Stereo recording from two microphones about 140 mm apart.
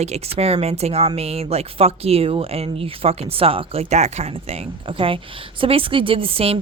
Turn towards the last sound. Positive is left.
turn(degrees=-45)  # may be behind; listen again after turning